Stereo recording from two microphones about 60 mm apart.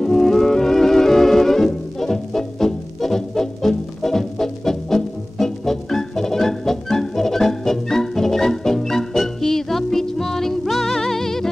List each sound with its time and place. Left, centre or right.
0.0 s music: centre